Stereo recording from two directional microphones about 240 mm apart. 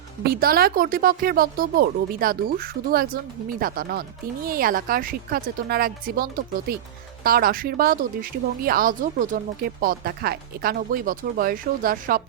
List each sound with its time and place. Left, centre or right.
0.3 s speech: right